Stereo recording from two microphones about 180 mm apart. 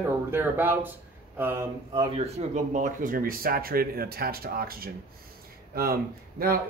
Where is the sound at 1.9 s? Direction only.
35° right (ahead or behind).